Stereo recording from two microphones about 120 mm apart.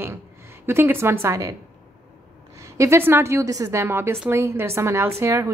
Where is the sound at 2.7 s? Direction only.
25° right (ahead or behind).